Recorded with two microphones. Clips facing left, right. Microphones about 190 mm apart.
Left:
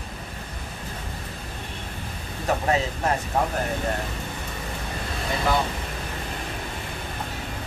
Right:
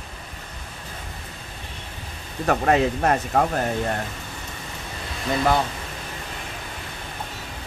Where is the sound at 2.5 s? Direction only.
65° right (ahead or behind).